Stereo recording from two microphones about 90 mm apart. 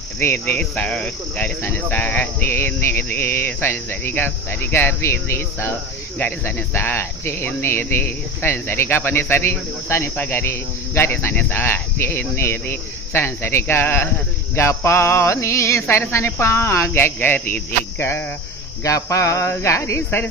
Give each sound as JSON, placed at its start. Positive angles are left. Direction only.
{"t": 0.2, "sound": "speech", "side_deg": 25}
{"t": 0.6, "sound": "cricket", "side_deg": 15}
{"t": 1.5, "sound": "speech", "side_deg": 20}
{"t": 14.5, "sound": "cricket", "side_deg": 30}
{"t": 14.8, "sound": "speech", "side_deg": 30}